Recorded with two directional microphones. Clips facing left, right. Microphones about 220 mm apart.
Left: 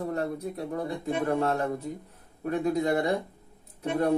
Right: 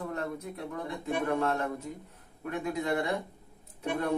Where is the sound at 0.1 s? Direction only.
35° left (ahead or behind).